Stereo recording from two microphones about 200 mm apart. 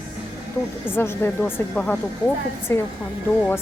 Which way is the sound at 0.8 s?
10° left (ahead or behind).